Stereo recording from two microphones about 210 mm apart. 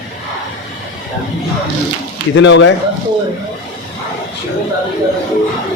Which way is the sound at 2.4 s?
60° left (ahead or behind).